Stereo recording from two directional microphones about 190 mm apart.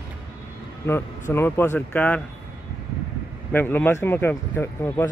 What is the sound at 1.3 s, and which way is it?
Speech, 15° left (ahead or behind).